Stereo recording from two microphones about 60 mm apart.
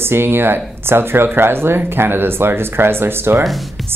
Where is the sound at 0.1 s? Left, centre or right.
Right.